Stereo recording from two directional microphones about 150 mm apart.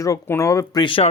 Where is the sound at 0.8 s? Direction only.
35° left (ahead or behind).